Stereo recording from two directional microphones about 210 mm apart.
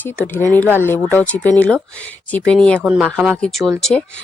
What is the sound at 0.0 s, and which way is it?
Speech, 10° left (ahead or behind).